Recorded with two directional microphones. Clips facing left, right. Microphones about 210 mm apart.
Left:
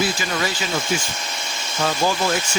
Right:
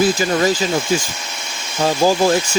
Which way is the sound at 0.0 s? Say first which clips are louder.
Right 8 dB; 45° right (ahead or behind).